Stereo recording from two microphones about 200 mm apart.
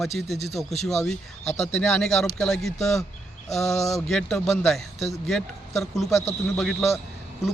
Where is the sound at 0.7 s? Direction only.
35° left (ahead or behind).